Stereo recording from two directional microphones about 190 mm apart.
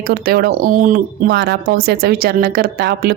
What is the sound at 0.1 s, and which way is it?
A woman's voice, 50° right (ahead or behind).